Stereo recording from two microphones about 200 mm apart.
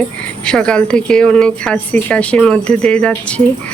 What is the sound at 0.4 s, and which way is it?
Speech, 5° left (ahead or behind).